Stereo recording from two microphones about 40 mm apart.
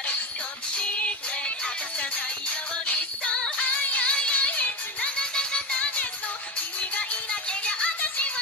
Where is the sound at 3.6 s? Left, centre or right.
Left.